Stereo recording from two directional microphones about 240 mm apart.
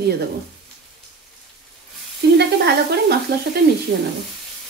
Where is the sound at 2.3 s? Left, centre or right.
Right.